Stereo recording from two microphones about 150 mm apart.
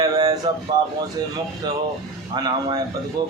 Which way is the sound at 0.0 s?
25° right (ahead or behind).